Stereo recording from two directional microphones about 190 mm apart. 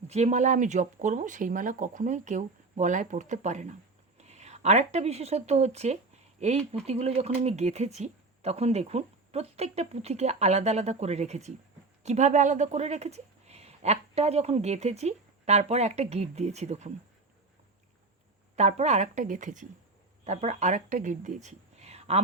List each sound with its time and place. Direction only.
0.1 s speech: 35° right (ahead or behind)
18.5 s speech: 35° right (ahead or behind)